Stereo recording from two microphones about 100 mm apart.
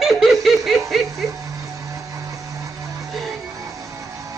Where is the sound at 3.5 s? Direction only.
35° right (ahead or behind).